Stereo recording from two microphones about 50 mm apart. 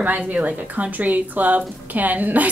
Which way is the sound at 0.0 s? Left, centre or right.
Right.